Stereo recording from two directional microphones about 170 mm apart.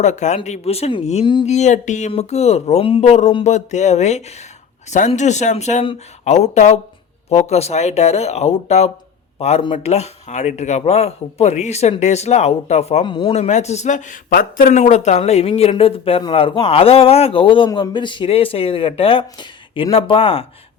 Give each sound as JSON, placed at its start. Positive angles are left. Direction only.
{"t": 0.0, "sound": "speech", "side_deg": 45}
{"t": 1.5, "sound": "speech", "side_deg": 45}
{"t": 13.3, "sound": "speech", "side_deg": 40}